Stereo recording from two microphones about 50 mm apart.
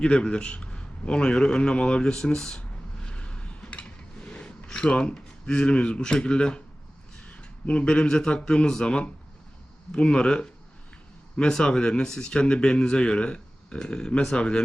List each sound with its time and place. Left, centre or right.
0.0 s a man's voice: centre
2.6 s a sound: left
7.3 s a man's voice: left